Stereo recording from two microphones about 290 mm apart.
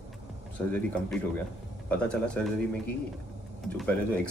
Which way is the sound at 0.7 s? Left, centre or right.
Centre.